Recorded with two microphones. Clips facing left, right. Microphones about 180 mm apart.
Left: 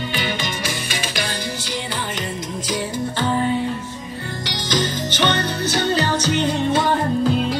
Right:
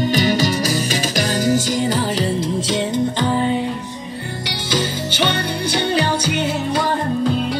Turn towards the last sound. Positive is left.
turn(degrees=-10)  # may be behind; listen again after turning